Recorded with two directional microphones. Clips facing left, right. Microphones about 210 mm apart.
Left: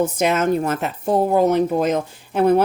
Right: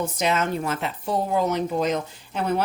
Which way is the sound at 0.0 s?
50° left (ahead or behind).